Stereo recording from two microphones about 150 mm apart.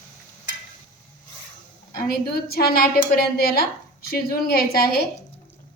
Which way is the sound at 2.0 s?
90° left.